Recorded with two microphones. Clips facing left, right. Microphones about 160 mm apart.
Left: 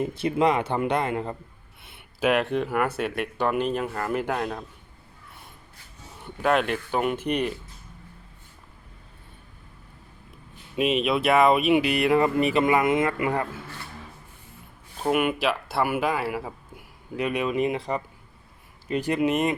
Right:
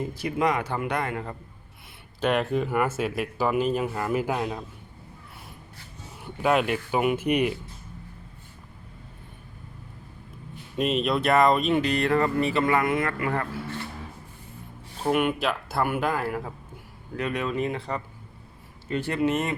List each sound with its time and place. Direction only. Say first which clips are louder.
0.0 s speech: left 3 dB; 25° left (ahead or behind)
2.2 s speech: left 1 dB; centre (ahead or behind)
6.2 s speech: even; 5° right (ahead or behind)
10.8 s speech: left 1 dB; 5° left (ahead or behind)
15.0 s speech: left 1 dB; 5° left (ahead or behind)